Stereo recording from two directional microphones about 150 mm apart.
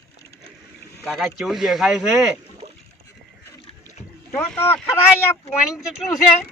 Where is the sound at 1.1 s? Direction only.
Centre (ahead or behind).